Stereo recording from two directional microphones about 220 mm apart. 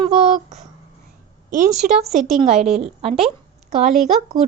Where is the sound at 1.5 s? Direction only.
35° right (ahead or behind).